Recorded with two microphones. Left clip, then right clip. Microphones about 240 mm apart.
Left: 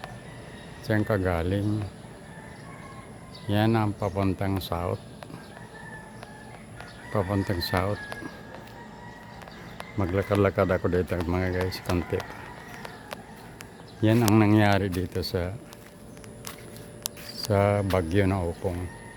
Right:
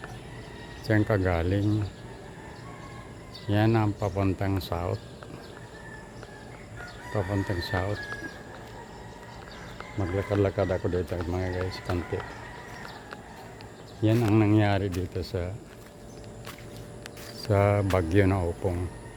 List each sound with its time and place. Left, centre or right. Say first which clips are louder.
0.9 s speech: even; centre
3.5 s speech: even; centre
7.1 s speech: left 3 dB; centre
10.0 s speech: left 3 dB; left
14.0 s speech: left 2 dB; left
17.5 s speech: left 1 dB; centre